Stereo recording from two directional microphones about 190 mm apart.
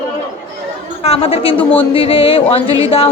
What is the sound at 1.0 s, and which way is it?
Speech, 30° left (ahead or behind).